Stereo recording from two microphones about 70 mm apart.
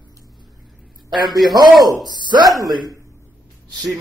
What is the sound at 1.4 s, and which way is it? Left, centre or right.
Speech, right.